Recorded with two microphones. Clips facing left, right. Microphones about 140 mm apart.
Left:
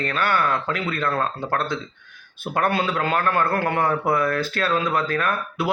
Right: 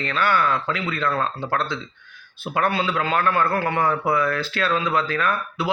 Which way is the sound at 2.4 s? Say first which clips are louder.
Even; 50° left (ahead or behind).